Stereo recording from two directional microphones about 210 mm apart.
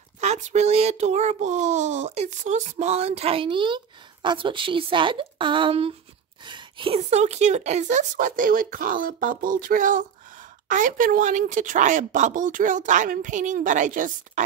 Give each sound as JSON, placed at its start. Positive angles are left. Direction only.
{"t": 0.2, "sound": "speech", "side_deg": -35}